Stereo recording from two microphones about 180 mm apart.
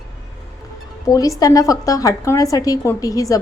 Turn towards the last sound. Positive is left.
turn(degrees=20)  # may be behind; listen again after turning